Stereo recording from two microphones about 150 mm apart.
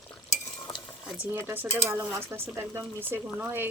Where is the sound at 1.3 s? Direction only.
15° right (ahead or behind).